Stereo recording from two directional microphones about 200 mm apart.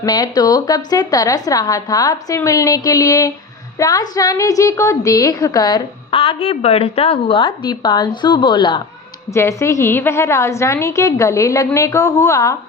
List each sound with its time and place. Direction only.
0.0 s a woman's voice: 20° left (ahead or behind)